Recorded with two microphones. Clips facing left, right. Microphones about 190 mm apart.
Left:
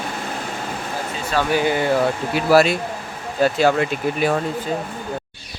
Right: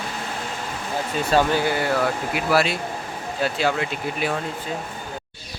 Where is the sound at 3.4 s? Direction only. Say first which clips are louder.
Left 6 dB; 45° left (ahead or behind).